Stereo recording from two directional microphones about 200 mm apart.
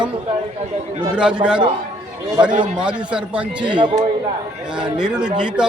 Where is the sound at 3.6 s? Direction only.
25° right (ahead or behind).